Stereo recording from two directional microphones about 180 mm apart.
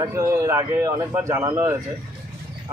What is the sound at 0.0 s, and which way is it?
A man's voice, 15° right (ahead or behind).